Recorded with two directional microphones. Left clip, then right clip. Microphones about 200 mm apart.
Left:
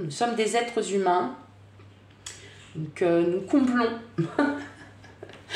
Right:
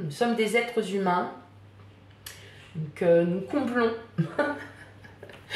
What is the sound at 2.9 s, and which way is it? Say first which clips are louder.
Speech: right 1 dB; 40° left (ahead or behind).